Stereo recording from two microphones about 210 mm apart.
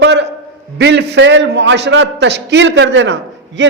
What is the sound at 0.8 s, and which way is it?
A man's voice, 55° right (ahead or behind).